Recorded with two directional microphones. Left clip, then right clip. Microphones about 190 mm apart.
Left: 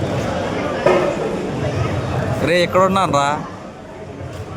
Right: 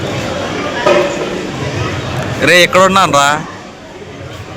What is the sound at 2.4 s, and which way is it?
Speech, 5° right (ahead or behind).